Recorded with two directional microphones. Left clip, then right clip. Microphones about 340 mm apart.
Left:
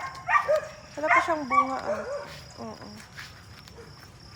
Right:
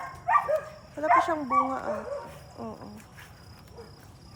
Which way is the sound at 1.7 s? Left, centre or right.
Centre.